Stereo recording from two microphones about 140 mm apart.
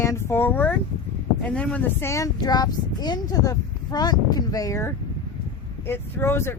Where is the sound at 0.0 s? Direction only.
20° left (ahead or behind).